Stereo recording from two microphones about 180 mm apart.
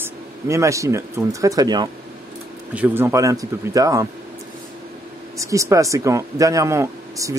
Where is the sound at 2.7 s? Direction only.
10° right (ahead or behind).